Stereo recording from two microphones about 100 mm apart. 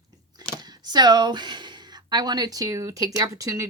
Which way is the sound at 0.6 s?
45° right (ahead or behind).